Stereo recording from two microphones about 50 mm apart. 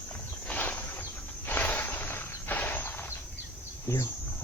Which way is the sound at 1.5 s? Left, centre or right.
Left.